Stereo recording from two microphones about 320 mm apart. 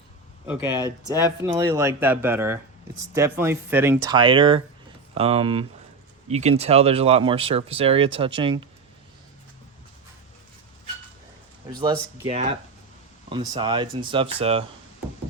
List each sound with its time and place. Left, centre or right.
0.4 s speech: centre
0.9 s speech: centre
1.4 s speech: centre
11.7 s speech: centre